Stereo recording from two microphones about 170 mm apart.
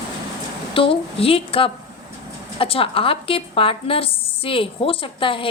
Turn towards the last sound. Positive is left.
turn(degrees=30)  # may be behind; listen again after turning